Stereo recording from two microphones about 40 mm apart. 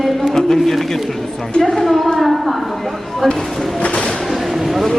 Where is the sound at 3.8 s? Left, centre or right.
Left.